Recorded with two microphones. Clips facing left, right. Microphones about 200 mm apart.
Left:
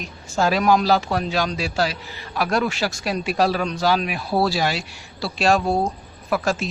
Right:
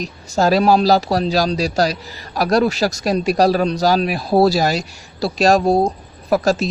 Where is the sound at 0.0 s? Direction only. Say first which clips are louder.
Right 4 dB; 40° right (ahead or behind).